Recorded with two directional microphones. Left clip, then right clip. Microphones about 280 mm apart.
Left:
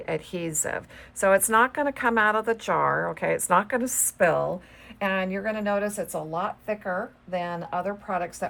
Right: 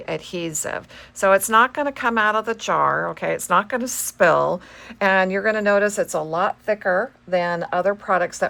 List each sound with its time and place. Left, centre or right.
0.0 s speech: centre; by 8.4 s right